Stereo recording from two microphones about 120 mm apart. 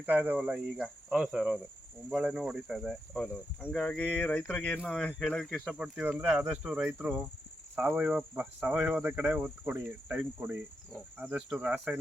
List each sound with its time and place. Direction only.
0.0 s speech: 15° right (ahead or behind)